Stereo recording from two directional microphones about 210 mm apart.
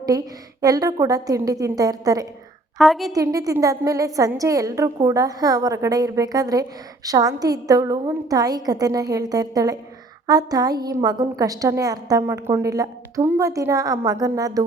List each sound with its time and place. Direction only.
0.1 s a woman's voice: 15° right (ahead or behind)
2.7 s a woman's voice: centre (ahead or behind)
3.1 s a woman's voice: 15° right (ahead or behind)